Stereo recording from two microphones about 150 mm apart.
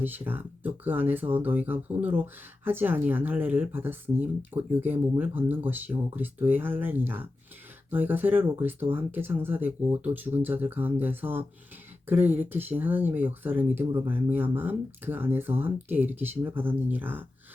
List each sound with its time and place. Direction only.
0.0 s speech: 15° right (ahead or behind)
13.8 s speech: 25° right (ahead or behind)
14.1 s speech: 15° right (ahead or behind)